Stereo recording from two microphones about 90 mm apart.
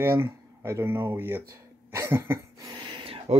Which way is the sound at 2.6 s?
55° right (ahead or behind).